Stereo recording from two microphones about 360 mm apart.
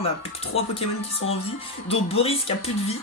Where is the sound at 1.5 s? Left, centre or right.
Centre.